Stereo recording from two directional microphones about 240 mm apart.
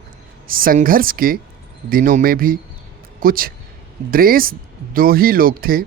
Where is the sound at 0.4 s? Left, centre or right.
Right.